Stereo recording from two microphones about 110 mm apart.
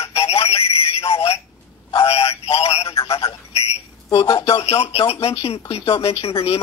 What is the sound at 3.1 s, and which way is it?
Telephone, 60° left (ahead or behind).